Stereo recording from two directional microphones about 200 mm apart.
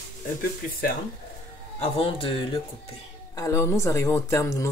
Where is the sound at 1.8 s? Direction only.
25° left (ahead or behind).